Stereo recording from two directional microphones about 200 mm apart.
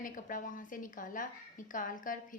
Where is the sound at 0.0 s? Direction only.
40° left (ahead or behind).